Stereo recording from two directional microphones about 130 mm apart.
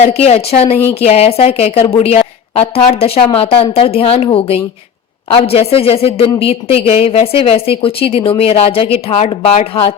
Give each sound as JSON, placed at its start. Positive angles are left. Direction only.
{"t": 0.0, "sound": "a woman's voice", "side_deg": 55}